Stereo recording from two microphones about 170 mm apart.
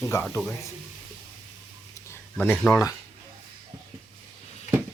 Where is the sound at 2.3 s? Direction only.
10° left (ahead or behind).